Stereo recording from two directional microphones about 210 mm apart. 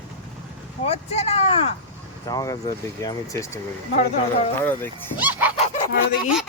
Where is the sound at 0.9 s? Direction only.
30° left (ahead or behind).